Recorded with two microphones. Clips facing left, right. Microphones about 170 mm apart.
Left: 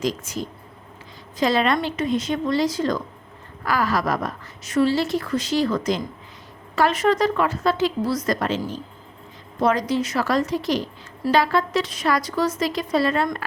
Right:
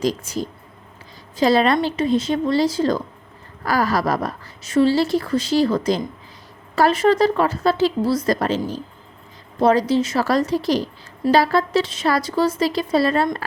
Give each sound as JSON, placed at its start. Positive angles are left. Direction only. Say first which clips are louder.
{"t": 0.0, "sound": "a woman's voice", "louder": "right 3 dB", "side_deg": -35}